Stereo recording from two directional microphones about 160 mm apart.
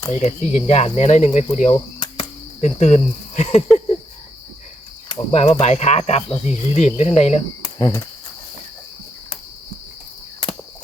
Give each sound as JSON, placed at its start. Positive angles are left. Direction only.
{"t": 0.1, "sound": "speech", "side_deg": 45}
{"t": 5.0, "sound": "speech", "side_deg": 40}
{"t": 7.8, "sound": "speech", "side_deg": 25}